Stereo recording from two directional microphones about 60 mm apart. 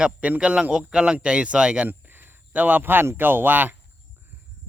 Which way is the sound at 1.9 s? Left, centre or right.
Right.